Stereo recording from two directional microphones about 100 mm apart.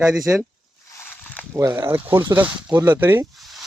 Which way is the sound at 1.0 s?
15° left (ahead or behind).